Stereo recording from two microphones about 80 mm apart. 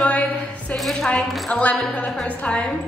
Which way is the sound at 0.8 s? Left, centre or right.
Centre.